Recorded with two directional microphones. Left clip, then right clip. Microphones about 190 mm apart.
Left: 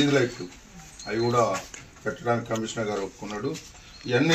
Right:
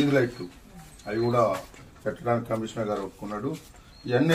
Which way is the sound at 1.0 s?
15° right (ahead or behind).